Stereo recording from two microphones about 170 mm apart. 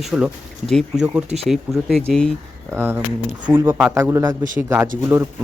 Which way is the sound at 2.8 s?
10° right (ahead or behind).